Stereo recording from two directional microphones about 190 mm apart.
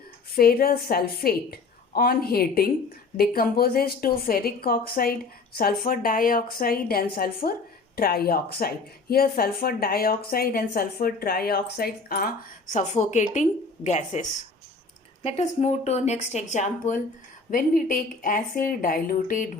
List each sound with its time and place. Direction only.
0.3 s speech: 50° left (ahead or behind)
12.7 s speech: 40° left (ahead or behind)